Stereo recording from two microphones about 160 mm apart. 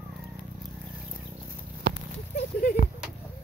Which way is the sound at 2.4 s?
75° left (ahead or behind).